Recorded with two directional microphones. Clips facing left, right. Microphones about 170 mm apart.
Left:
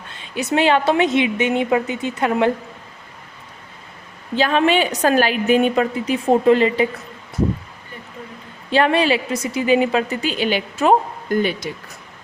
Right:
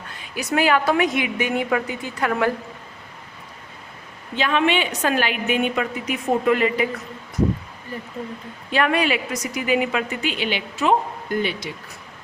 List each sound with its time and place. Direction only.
0.1 s a woman's voice: 25° left (ahead or behind)
4.4 s a woman's voice: 35° left (ahead or behind)
8.7 s a woman's voice: 30° left (ahead or behind)